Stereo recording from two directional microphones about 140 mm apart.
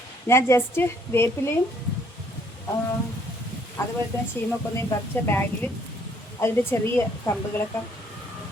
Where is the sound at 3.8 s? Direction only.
20° left (ahead or behind).